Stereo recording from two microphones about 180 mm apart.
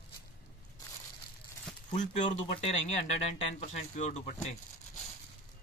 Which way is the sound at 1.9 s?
40° left (ahead or behind).